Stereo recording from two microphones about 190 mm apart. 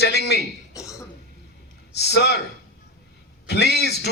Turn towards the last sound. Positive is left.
turn(degrees=60)  # may be behind; listen again after turning